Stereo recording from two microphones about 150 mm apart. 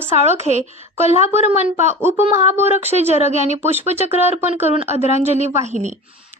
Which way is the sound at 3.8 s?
45° right (ahead or behind).